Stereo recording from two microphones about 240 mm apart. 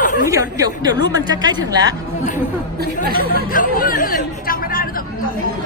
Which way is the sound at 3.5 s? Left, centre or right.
Left.